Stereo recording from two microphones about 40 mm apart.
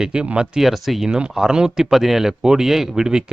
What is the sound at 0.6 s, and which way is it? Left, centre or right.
A man's voice, centre.